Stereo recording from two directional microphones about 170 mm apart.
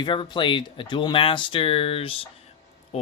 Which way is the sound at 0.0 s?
30° left (ahead or behind).